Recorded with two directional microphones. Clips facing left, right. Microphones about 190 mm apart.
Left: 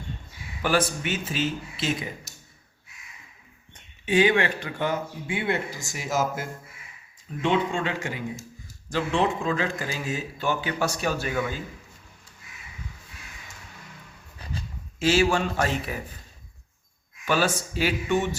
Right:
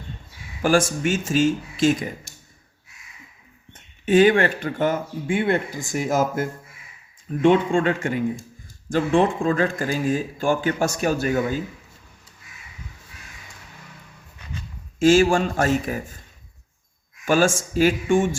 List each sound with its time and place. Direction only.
0.6 s speech: 45° right (ahead or behind)
4.0 s speech: 50° right (ahead or behind)
14.3 s a sound: 35° left (ahead or behind)
14.9 s speech: 50° right (ahead or behind)
17.2 s speech: 45° right (ahead or behind)